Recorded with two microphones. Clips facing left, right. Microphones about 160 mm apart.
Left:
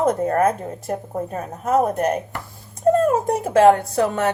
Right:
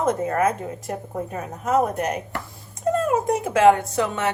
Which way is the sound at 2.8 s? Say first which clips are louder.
Left 4 dB; 30° left (ahead or behind).